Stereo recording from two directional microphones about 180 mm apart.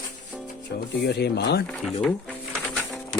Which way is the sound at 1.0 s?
65° left (ahead or behind).